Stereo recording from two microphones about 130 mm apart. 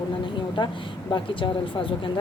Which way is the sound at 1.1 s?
40° left (ahead or behind).